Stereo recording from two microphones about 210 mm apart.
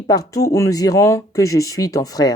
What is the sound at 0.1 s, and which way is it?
Speech, 15° left (ahead or behind).